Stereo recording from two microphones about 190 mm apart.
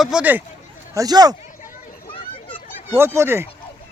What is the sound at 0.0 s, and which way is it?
Speech, 5° right (ahead or behind).